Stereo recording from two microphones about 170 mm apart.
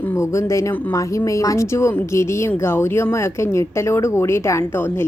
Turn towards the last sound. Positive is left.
turn(degrees=15)  # may be behind; listen again after turning